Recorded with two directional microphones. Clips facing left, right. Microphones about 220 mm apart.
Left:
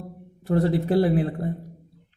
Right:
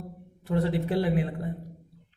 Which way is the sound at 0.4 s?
40° left (ahead or behind).